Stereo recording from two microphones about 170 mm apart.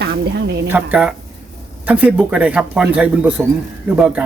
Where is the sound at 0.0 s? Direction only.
75° right (ahead or behind).